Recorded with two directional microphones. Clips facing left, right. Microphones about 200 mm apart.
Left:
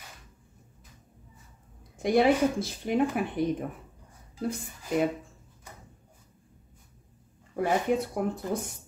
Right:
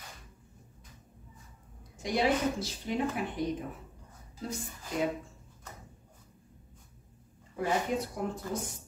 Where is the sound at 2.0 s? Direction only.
55° left (ahead or behind).